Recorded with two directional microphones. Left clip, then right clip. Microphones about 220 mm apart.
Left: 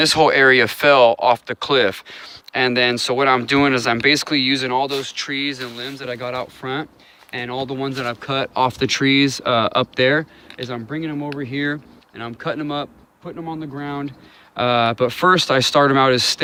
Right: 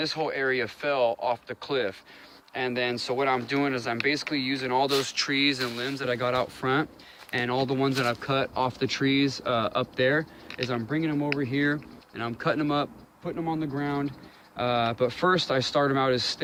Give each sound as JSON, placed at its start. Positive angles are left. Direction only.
{"t": 0.0, "sound": "speech", "side_deg": 40}
{"t": 4.8, "sound": "speech", "side_deg": 15}
{"t": 8.0, "sound": "speech", "side_deg": 25}
{"t": 8.3, "sound": "speech", "side_deg": 40}
{"t": 10.6, "sound": "speech", "side_deg": 25}
{"t": 14.5, "sound": "speech", "side_deg": 45}